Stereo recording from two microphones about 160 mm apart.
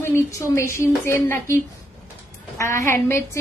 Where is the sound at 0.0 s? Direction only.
15° left (ahead or behind).